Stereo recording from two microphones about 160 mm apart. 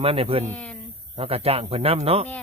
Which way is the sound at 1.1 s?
35° right (ahead or behind).